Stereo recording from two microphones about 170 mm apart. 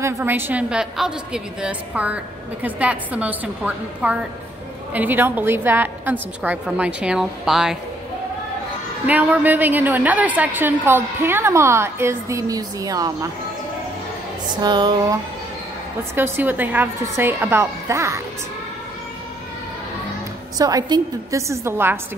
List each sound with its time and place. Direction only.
0.0 s a woman's voice: 10° right (ahead or behind)
9.0 s a woman's voice: 10° right (ahead or behind)
14.6 s music: 25° right (ahead or behind)
16.2 s a woman's voice: 10° right (ahead or behind)
20.5 s a woman's voice: 20° right (ahead or behind)